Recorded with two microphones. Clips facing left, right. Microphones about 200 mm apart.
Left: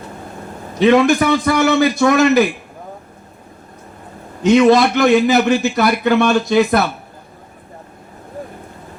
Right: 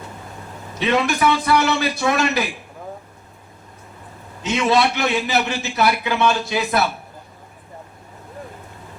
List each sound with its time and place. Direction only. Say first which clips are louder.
0.9 s a man's voice: left 7 dB; 50° left (ahead or behind)
4.4 s a man's voice: left 8 dB; 60° left (ahead or behind)